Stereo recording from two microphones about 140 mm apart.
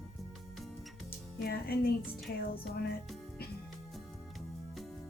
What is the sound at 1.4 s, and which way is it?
Music, 90° left.